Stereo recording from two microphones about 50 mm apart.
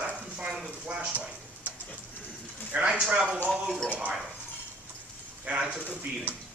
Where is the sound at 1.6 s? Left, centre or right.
Right.